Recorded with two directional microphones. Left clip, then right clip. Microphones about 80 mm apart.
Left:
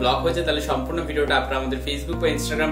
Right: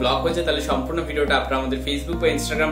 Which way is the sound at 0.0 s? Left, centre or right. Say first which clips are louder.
Even; left.